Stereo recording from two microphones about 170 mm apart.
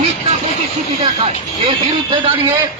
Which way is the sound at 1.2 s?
30° right (ahead or behind).